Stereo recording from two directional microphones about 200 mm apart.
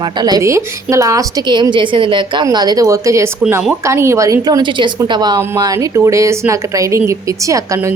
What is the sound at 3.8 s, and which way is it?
A woman's voice, 15° right (ahead or behind).